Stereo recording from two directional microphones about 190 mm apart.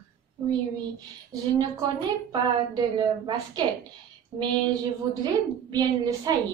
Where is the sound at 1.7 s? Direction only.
20° right (ahead or behind).